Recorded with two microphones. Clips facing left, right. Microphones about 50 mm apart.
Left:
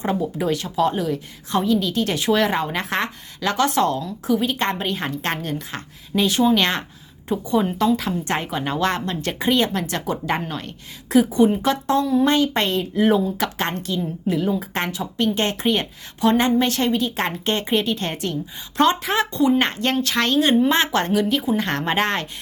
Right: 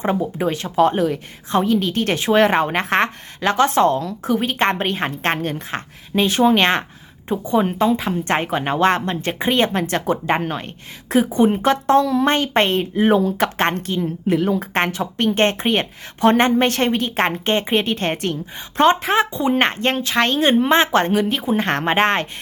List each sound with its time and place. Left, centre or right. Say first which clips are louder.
0.0 s a woman's voice: right 2 dB; right